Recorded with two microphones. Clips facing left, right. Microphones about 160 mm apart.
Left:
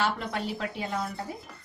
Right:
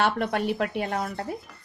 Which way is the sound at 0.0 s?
60° right (ahead or behind).